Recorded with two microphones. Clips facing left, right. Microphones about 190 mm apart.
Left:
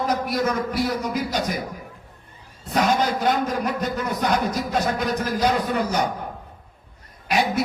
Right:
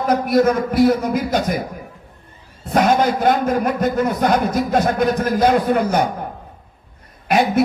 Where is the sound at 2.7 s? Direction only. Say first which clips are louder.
Right 5 dB; 50° right (ahead or behind).